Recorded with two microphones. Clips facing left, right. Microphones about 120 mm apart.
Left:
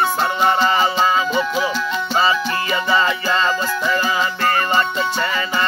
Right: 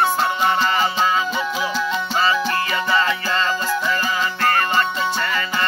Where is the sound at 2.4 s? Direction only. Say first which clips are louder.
Left 1 dB; 10° left (ahead or behind).